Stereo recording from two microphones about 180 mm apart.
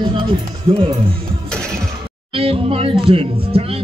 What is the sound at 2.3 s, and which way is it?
Speech, 30° right (ahead or behind).